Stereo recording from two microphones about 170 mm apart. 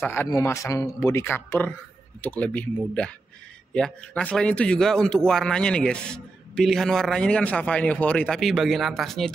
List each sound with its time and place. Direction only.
0.0 s a man's voice: 15° left (ahead or behind)